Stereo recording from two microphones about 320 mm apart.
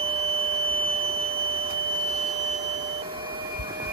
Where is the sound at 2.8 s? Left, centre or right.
Centre.